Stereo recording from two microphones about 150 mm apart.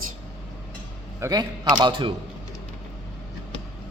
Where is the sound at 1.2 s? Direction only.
25° right (ahead or behind).